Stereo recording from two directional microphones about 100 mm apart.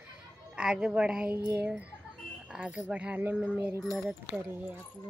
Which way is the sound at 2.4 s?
5° right (ahead or behind).